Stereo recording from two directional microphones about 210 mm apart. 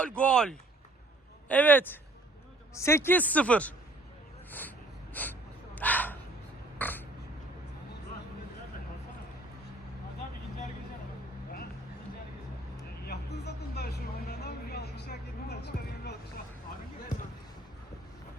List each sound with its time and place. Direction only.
0.0 s speech: 5° left (ahead or behind)
5.2 s speech: 10° left (ahead or behind)
5.7 s dog: 10° left (ahead or behind)
6.7 s a sound: 10° left (ahead or behind)
13.0 s vehicle: 50° left (ahead or behind)